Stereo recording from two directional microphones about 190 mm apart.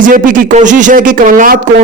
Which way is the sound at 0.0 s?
45° right (ahead or behind).